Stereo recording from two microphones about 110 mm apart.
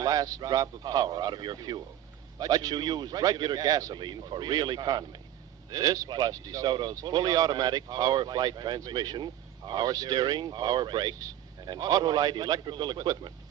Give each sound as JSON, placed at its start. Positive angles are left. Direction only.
{"t": 0.0, "sound": "speech", "side_deg": -35}